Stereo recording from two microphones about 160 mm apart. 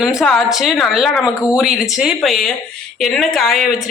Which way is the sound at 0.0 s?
5° right (ahead or behind).